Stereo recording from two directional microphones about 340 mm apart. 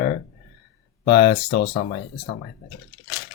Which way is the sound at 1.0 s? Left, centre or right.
Centre.